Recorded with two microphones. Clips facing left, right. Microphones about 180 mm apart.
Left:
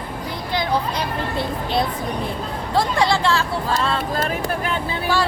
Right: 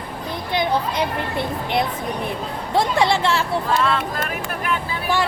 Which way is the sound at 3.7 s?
30° left (ahead or behind).